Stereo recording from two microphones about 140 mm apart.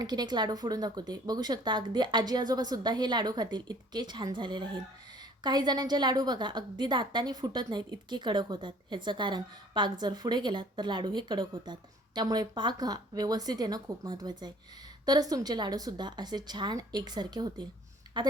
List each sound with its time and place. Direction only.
0.0 s a woman's voice: 30° right (ahead or behind)